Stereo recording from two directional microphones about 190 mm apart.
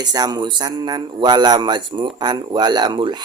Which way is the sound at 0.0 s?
20° right (ahead or behind).